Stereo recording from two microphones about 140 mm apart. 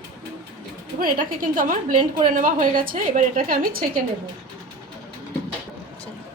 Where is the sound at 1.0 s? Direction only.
85° right.